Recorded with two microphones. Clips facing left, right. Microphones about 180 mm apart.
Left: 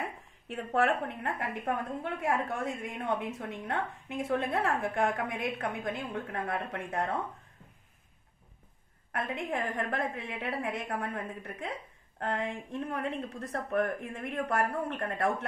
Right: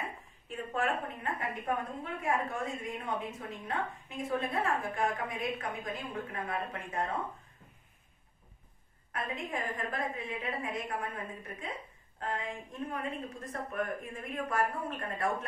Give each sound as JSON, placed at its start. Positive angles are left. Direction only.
{"t": 0.5, "sound": "a woman's voice", "side_deg": 75}
{"t": 9.1, "sound": "a woman's voice", "side_deg": 75}